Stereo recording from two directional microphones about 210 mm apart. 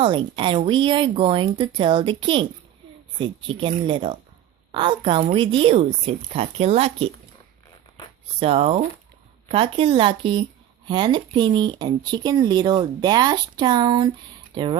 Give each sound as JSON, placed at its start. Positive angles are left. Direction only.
{"t": 0.0, "sound": "speech", "side_deg": -25}
{"t": 8.4, "sound": "speech", "side_deg": -25}